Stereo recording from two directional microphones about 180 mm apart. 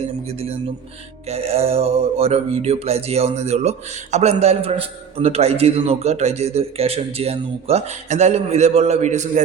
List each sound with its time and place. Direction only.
0.0 s mantra: 35° right (ahead or behind)